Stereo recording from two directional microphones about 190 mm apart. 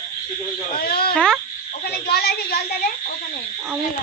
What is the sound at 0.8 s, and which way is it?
A woman's voice, 55° left (ahead or behind).